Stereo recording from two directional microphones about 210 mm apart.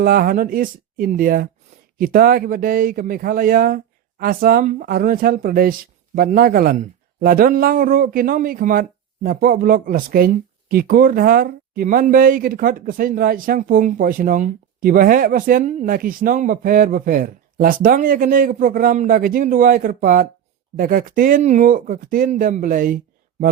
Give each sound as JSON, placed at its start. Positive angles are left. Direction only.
{"t": 0.0, "sound": "speech", "side_deg": -45}